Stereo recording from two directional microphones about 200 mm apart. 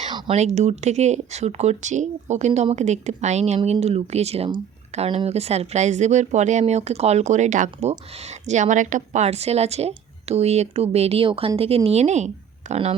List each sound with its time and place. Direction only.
0.1 s speech: 30° right (ahead or behind)